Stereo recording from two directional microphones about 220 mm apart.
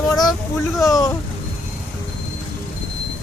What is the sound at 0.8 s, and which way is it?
Speech, 15° left (ahead or behind).